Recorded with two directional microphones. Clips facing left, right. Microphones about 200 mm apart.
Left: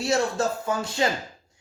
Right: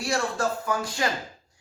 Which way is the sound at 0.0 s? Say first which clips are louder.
Left 3 dB; 25° left (ahead or behind).